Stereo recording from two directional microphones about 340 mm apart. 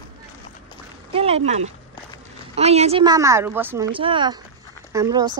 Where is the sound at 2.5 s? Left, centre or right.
Centre.